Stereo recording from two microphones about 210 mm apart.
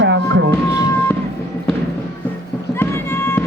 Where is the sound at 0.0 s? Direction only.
55° right (ahead or behind).